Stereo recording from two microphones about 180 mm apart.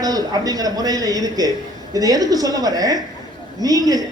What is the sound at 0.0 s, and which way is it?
A man's voice, 20° right (ahead or behind).